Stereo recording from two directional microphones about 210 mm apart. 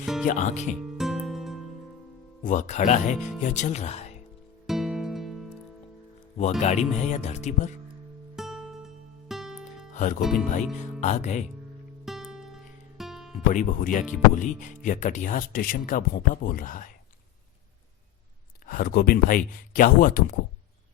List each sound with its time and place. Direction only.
0.0 s music: centre (ahead or behind)
0.3 s speech: 35° left (ahead or behind)
0.8 s music: centre (ahead or behind)
2.4 s speech: 35° left (ahead or behind)
4.6 s music: centre (ahead or behind)
6.6 s speech: 35° left (ahead or behind)
8.4 s music: centre (ahead or behind)
9.9 s music: 35° left (ahead or behind)
10.2 s speech: centre (ahead or behind)
11.0 s speech: 35° left (ahead or behind)
12.0 s music: centre (ahead or behind)
13.5 s speech: 40° left (ahead or behind)
18.6 s speech: 45° left (ahead or behind)